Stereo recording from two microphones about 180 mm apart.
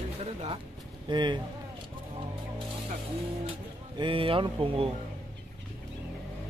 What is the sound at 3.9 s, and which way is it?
Speech, 30° right (ahead or behind).